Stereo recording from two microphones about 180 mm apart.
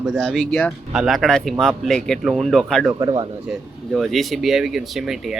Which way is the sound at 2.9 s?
25° right (ahead or behind).